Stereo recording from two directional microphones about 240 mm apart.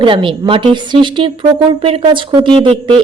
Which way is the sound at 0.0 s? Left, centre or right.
Right.